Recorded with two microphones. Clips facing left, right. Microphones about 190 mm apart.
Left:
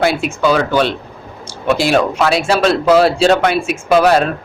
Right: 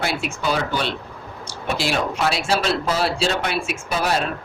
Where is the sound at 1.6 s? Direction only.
70° left (ahead or behind).